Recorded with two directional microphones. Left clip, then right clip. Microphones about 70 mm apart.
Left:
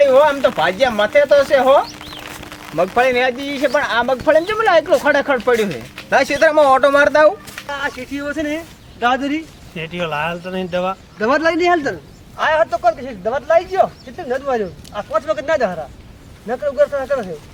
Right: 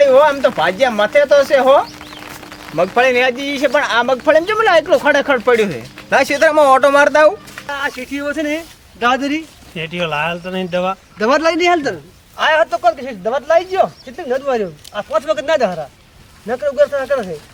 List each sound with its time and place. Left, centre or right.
0.0 s speech: centre
2.2 s a sound: left
2.7 s speech: centre
7.7 s speech: centre
9.7 s speech: centre
11.2 s speech: centre